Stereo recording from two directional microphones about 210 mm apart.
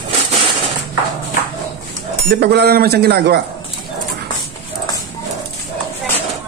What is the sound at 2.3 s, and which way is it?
A man's voice, 50° right (ahead or behind).